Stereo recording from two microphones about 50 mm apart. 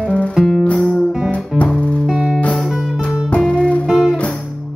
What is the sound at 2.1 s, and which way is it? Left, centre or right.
Music, right.